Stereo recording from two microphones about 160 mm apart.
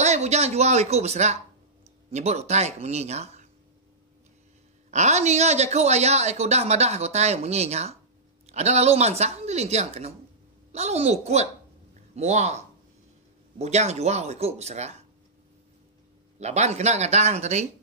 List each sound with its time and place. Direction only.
0.0 s speech: 45° right (ahead or behind)
4.9 s speech: 45° right (ahead or behind)
13.6 s speech: 40° right (ahead or behind)
16.3 s speech: 45° right (ahead or behind)